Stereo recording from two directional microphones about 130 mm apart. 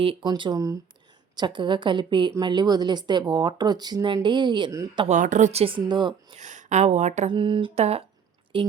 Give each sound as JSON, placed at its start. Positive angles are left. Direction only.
{"t": 0.0, "sound": "speech", "side_deg": -40}
{"t": 5.0, "sound": "a woman's voice", "side_deg": -70}
{"t": 6.3, "sound": "speech", "side_deg": -65}
{"t": 7.3, "sound": "speech", "side_deg": -40}
{"t": 7.8, "sound": "a woman's voice", "side_deg": -50}
{"t": 8.5, "sound": "speech", "side_deg": -40}